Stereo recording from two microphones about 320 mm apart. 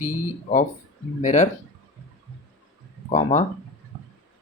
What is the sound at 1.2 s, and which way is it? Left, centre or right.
Speech, left.